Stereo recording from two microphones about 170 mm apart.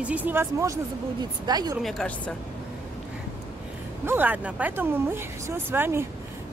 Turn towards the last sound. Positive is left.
turn(degrees=-10)  # may be behind; listen again after turning